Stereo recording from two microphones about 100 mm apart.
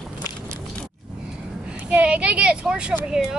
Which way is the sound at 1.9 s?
10° right (ahead or behind).